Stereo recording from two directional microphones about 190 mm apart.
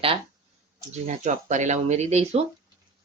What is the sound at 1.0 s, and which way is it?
Speech, 40° right (ahead or behind).